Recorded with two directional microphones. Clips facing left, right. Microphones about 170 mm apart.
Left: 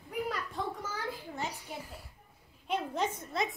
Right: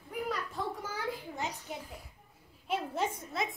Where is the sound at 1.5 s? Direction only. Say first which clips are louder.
Right 1 dB; 10° left (ahead or behind).